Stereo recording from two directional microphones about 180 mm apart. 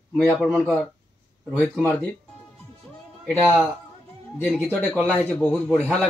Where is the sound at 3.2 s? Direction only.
5° left (ahead or behind).